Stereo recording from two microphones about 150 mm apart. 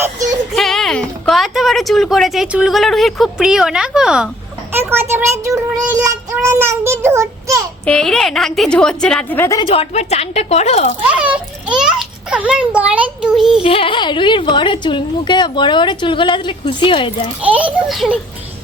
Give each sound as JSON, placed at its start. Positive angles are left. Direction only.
{"t": 0.5, "sound": "speech", "side_deg": 0}
{"t": 4.7, "sound": "a child's voice", "side_deg": -15}
{"t": 7.9, "sound": "a woman's voice", "side_deg": 5}
{"t": 9.4, "sound": "a woman's voice", "side_deg": 20}
{"t": 9.6, "sound": "speech", "side_deg": 45}
{"t": 11.1, "sound": "a child's voice", "side_deg": -10}
{"t": 13.6, "sound": "speech", "side_deg": 40}
{"t": 17.4, "sound": "a child's voice", "side_deg": -10}